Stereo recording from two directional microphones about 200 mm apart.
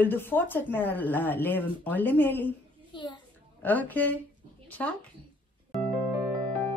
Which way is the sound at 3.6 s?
10° left (ahead or behind).